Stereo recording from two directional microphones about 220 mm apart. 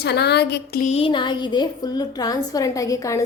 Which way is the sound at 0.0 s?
50° left (ahead or behind).